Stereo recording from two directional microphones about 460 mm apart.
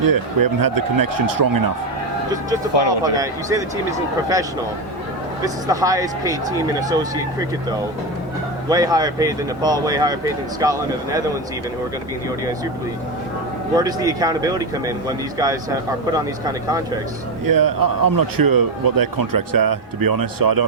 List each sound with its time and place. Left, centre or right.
0.0 s a man's voice: right
3.0 s speech: centre
5.6 s speech: centre
8.7 s speech: centre
13.7 s speech: centre
17.4 s a man's voice: right